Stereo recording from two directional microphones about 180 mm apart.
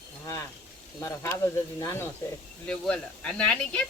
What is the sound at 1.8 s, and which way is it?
Speech, 15° left (ahead or behind).